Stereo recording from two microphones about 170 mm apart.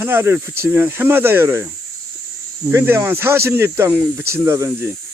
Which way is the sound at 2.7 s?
15° right (ahead or behind).